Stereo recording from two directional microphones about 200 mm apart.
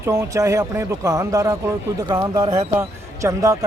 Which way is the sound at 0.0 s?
15° right (ahead or behind).